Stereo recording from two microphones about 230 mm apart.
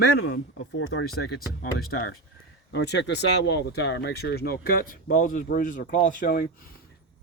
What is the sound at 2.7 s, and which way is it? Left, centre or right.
Speech, left.